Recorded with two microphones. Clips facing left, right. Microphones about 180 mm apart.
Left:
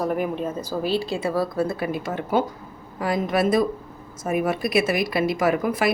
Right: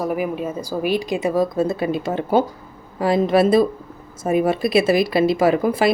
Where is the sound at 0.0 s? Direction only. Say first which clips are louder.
Right 2 dB; 5° right (ahead or behind).